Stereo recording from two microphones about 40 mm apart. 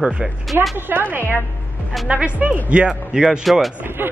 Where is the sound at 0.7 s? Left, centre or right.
Right.